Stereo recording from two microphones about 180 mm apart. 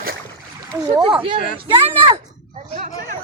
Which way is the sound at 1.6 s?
30° right (ahead or behind).